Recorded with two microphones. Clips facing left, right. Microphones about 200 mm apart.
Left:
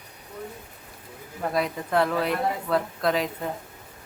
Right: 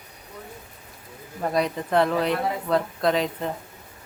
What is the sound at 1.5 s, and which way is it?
Speech, centre (ahead or behind).